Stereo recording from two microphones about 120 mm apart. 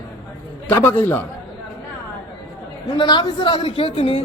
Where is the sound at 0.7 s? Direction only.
15° left (ahead or behind).